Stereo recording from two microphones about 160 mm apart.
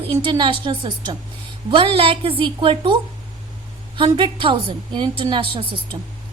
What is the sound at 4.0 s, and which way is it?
A woman's voice, 30° right (ahead or behind).